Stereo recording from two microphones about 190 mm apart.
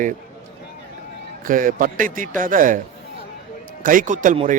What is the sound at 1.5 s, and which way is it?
A man's voice, 45° right (ahead or behind).